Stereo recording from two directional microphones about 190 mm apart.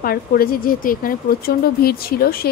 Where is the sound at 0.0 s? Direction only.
50° left (ahead or behind).